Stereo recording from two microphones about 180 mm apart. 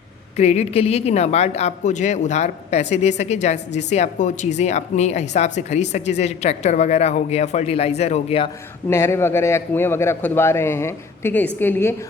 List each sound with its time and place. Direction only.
0.3 s speech: 35° left (ahead or behind)
8.9 s a man's voice: 15° left (ahead or behind)